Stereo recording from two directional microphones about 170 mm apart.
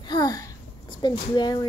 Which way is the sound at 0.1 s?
20° left (ahead or behind).